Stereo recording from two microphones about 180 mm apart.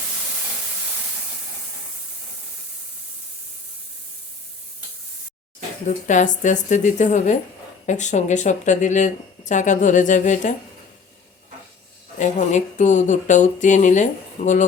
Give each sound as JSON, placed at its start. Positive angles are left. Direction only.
{"t": 5.9, "sound": "speech", "side_deg": 45}
{"t": 12.2, "sound": "speech", "side_deg": 45}